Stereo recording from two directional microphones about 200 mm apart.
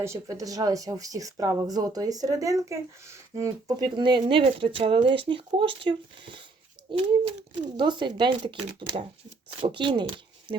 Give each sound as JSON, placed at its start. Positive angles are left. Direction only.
{"t": 0.0, "sound": "speech", "side_deg": -15}